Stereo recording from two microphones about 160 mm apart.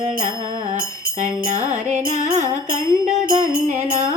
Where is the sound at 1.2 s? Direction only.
50° right (ahead or behind).